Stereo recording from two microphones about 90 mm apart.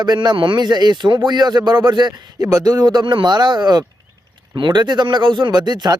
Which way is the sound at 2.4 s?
40° right (ahead or behind).